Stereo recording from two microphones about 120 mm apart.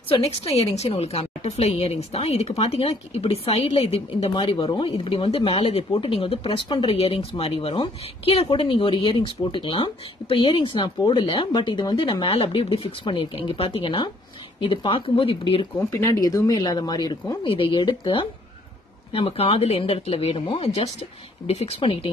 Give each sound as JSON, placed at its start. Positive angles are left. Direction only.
{"t": 0.6, "sound": "a woman's voice", "side_deg": 60}
{"t": 15.9, "sound": "a woman's voice", "side_deg": 30}